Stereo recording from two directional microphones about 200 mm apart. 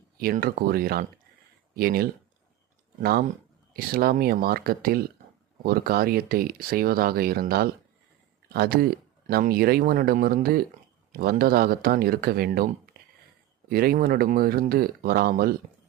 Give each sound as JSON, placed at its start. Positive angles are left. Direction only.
{"t": 0.2, "sound": "speech", "side_deg": -45}